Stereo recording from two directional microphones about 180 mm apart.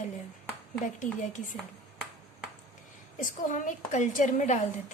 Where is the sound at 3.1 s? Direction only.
45° left (ahead or behind).